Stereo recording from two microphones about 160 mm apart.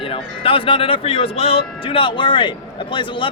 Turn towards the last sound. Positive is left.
turn(degrees=30)  # may be behind; listen again after turning